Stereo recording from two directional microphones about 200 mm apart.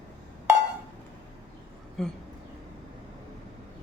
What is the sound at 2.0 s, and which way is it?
Speech, centre (ahead or behind).